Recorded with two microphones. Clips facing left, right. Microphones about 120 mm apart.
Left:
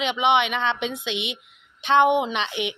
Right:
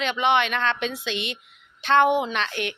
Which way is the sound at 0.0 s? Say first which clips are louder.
Left 1 dB; 15° left (ahead or behind).